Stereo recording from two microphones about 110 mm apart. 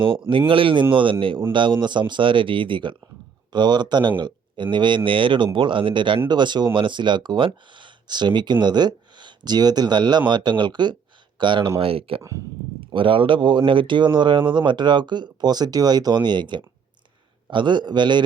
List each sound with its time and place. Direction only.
0.0 s speech: 50° right (ahead or behind)
11.8 s speech: 55° right (ahead or behind)